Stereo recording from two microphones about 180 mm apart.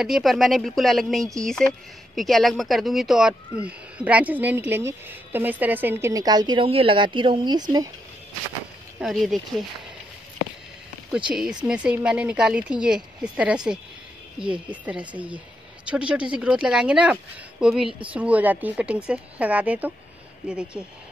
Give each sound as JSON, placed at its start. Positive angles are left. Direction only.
{"t": 0.0, "sound": "a woman's voice", "side_deg": 0}
{"t": 9.0, "sound": "speech", "side_deg": 0}
{"t": 11.2, "sound": "speech", "side_deg": -5}